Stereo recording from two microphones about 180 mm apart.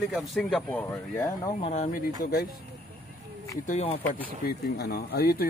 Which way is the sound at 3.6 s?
35° left (ahead or behind).